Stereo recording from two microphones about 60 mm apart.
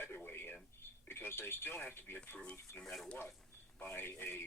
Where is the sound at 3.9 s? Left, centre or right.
Left.